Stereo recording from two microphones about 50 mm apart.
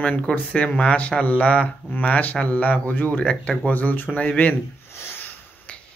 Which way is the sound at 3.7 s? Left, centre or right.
Left.